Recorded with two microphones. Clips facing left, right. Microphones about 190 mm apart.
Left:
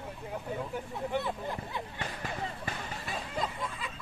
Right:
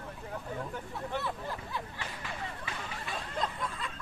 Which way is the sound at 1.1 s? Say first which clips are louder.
Left 3 dB; 20° left (ahead or behind).